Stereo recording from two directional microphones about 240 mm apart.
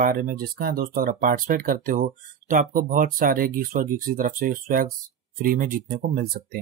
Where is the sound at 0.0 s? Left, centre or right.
Right.